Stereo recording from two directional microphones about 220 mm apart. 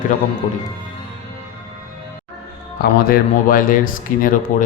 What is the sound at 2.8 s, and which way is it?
A man's voice, 40° left (ahead or behind).